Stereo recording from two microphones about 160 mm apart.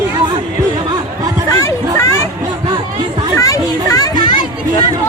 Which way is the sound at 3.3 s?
20° left (ahead or behind).